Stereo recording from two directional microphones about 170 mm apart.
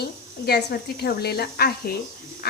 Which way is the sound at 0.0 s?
70° left (ahead or behind).